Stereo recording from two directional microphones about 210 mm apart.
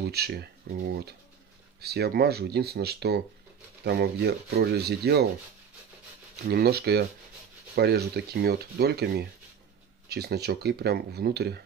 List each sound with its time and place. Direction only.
0.0 s speech: 50° right (ahead or behind)
6.5 s speech: 50° right (ahead or behind)